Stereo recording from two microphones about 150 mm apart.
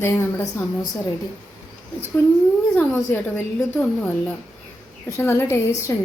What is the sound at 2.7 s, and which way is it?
A woman's voice, 15° left (ahead or behind).